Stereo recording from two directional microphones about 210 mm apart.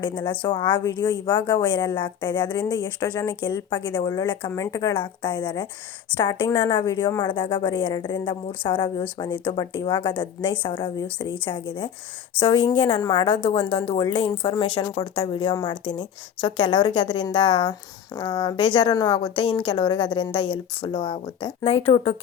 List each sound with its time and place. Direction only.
0.0 s a woman's voice: 20° left (ahead or behind)